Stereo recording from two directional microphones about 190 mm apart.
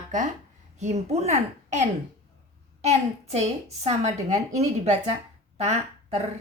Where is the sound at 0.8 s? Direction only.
35° right (ahead or behind).